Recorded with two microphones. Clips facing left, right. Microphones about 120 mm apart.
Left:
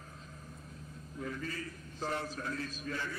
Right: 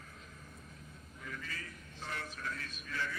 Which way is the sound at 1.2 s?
35° left (ahead or behind).